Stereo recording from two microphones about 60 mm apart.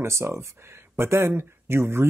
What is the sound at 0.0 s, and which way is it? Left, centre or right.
Speech, right.